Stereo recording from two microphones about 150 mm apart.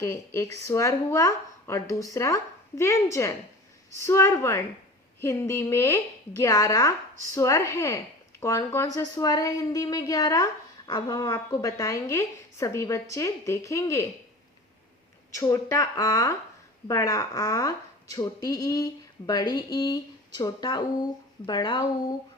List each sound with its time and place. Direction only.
0.0 s speech: 15° left (ahead or behind)
15.3 s speech: 20° left (ahead or behind)